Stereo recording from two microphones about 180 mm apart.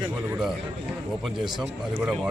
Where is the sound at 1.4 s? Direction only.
25° right (ahead or behind).